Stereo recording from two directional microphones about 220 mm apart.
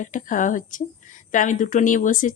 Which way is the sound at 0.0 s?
35° left (ahead or behind).